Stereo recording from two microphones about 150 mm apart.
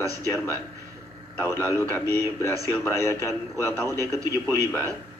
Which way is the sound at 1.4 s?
15° left (ahead or behind).